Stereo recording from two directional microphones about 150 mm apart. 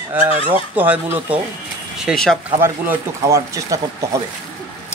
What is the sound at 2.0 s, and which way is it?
Speech, 5° left (ahead or behind).